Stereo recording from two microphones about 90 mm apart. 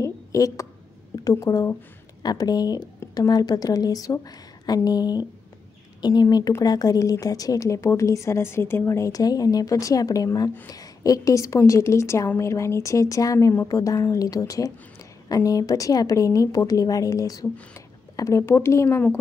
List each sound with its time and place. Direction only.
0.0 s a sound: 35° left (ahead or behind)
1.1 s a woman's voice: 40° left (ahead or behind)
18.9 s speech: 20° left (ahead or behind)